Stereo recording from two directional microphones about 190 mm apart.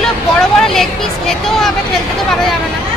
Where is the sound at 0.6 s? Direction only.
Centre (ahead or behind).